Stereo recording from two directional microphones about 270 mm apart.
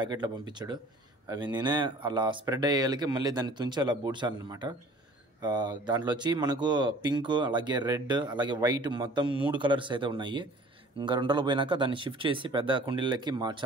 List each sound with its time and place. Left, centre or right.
0.0 s speech: centre